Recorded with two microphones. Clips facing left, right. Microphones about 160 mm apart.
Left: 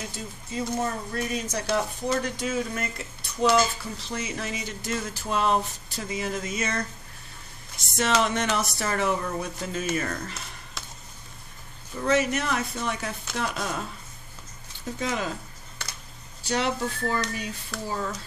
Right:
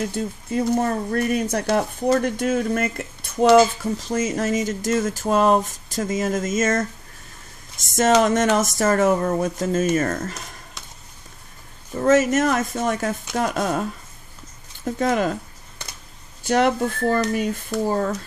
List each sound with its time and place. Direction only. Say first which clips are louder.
0.1 s speech: right 10 dB; 55° right (ahead or behind)
4.0 s speech: right 9 dB; 45° right (ahead or behind)
12.0 s speech: right 7 dB; 45° right (ahead or behind)
14.9 s speech: right 9 dB; 50° right (ahead or behind)
16.4 s speech: right 8 dB; 50° right (ahead or behind)